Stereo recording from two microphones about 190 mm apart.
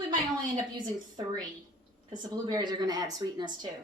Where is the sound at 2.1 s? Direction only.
25° right (ahead or behind).